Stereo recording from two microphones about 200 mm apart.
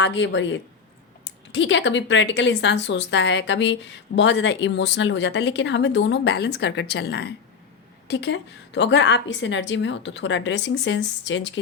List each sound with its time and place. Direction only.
0.0 s speech: 65° left (ahead or behind)